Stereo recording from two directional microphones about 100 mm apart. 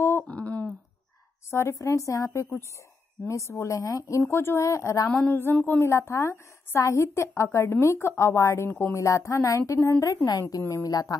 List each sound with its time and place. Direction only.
0.3 s a sound: 15° left (ahead or behind)
1.5 s speech: 25° left (ahead or behind)
5.1 s a woman's voice: 15° left (ahead or behind); by 11.1 s 35° left (ahead or behind)